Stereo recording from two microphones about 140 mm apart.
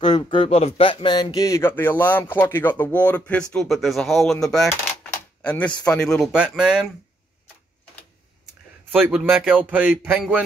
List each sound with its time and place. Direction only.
0.1 s speech: 35° left (ahead or behind); by 6.9 s 5° right (ahead or behind)
8.9 s a man's voice: 10° right (ahead or behind)